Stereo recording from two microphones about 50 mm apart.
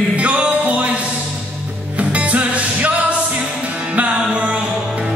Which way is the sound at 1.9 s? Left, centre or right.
Right.